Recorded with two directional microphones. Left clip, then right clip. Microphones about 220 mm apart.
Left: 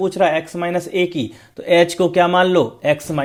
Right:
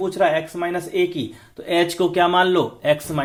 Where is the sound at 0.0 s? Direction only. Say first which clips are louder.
Left 2 dB; 40° left (ahead or behind).